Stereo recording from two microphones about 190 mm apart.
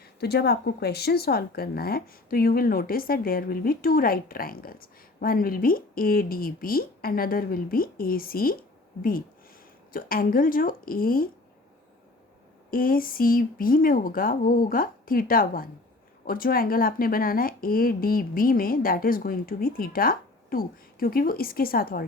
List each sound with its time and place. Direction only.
0.0 s speech: 55° left (ahead or behind)
12.7 s speech: 50° left (ahead or behind)